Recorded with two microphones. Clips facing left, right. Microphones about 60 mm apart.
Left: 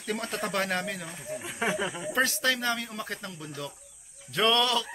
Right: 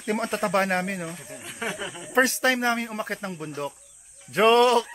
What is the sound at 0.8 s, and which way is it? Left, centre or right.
Speech, right.